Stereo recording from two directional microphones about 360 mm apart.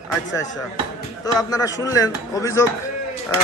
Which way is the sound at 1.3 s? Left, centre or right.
Centre.